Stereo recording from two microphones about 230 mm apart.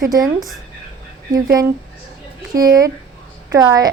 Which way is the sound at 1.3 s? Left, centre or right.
Centre.